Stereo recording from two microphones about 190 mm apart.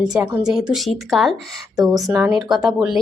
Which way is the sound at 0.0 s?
5° right (ahead or behind).